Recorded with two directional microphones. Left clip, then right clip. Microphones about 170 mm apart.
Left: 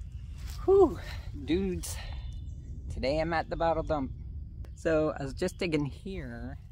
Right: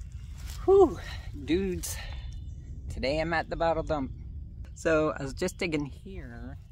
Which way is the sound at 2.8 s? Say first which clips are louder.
Even; 10° right (ahead or behind).